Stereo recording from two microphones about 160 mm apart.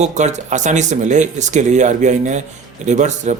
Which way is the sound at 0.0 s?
45° right (ahead or behind).